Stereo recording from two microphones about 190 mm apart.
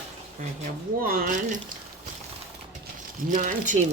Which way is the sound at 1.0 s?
50° right (ahead or behind).